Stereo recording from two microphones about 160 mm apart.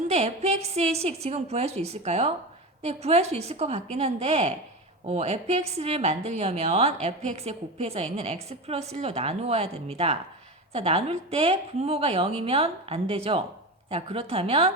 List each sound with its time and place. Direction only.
0.1 s a woman's voice: 40° right (ahead or behind)